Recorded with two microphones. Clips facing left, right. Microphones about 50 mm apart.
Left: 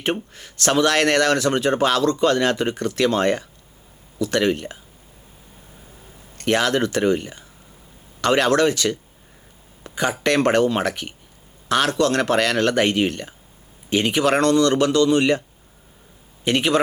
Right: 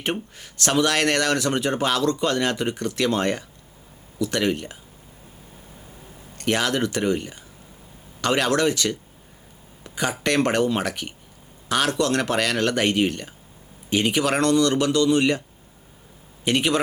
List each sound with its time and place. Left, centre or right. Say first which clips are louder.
0.0 s speech: left 3 dB; left
6.3 s speech: left 3 dB; left
16.5 s speech: left 2 dB; centre